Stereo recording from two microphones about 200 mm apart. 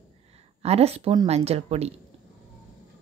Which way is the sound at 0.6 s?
30° right (ahead or behind).